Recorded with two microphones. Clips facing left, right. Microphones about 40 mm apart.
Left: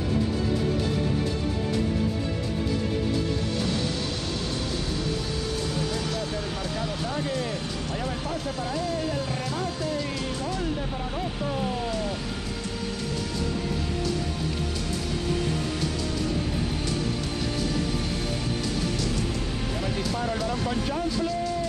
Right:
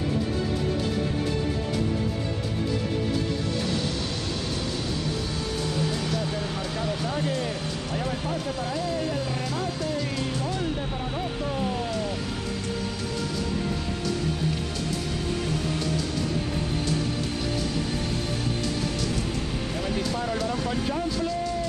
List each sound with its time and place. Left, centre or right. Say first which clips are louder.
6.1 s speech: right 1 dB; centre
10.6 s speech: even; centre
11.4 s speech: even; centre
19.8 s speech: right 1 dB; centre